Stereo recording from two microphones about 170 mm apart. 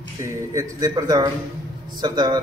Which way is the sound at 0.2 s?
20° right (ahead or behind).